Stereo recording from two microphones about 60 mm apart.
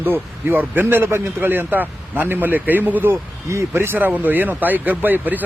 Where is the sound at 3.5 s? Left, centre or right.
Right.